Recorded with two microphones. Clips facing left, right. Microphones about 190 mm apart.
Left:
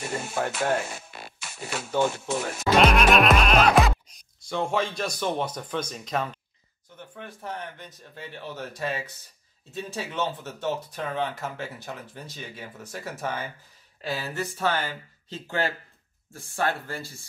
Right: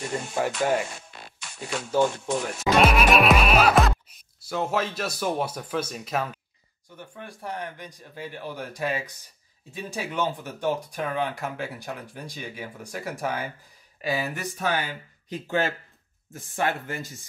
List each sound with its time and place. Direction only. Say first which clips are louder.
0.0 s speech: right 1 dB; 5° left (ahead or behind)
0.8 s a sound: left 2 dB; 5° left (ahead or behind)
2.0 s speech: right 2 dB; 5° left (ahead or behind)
2.6 s music: left 1 dB; 5° right (ahead or behind)
7.2 s speech: right 1 dB; 10° right (ahead or behind)